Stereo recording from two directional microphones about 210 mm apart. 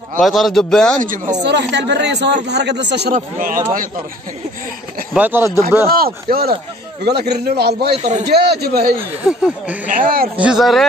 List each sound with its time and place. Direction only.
0.2 s a man's voice: centre (ahead or behind)
1.0 s speech: 40° right (ahead or behind)
1.4 s speech: 55° right (ahead or behind)
3.2 s speech: 40° right (ahead or behind)
5.1 s speech: 10° right (ahead or behind)
5.9 s a man's voice: 45° right (ahead or behind)
7.9 s speech: 30° right (ahead or behind)
8.3 s a man's voice: 50° right (ahead or behind)
9.2 s a man's voice: 5° right (ahead or behind)
9.8 s speech: 40° right (ahead or behind)
10.3 s a man's voice: 5° right (ahead or behind)